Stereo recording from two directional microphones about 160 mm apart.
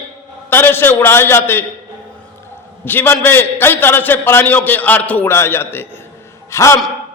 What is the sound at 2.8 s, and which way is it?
A man's voice, 15° left (ahead or behind).